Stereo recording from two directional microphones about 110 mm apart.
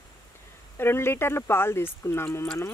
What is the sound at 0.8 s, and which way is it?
Speech, 20° left (ahead or behind).